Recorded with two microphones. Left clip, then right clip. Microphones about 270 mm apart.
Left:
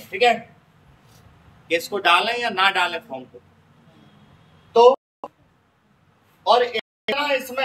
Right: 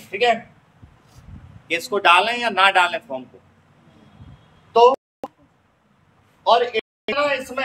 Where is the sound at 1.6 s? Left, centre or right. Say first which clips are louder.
Right 2 dB; centre.